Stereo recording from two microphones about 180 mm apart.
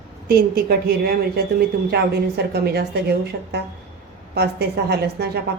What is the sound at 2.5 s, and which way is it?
A woman's voice, 65° right (ahead or behind).